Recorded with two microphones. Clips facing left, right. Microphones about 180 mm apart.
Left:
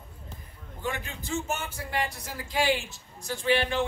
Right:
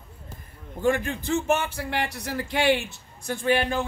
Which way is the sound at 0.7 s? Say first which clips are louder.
Right 10 dB; 50° right (ahead or behind).